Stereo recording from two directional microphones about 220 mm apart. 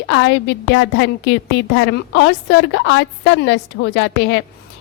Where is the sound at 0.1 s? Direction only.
55° left (ahead or behind).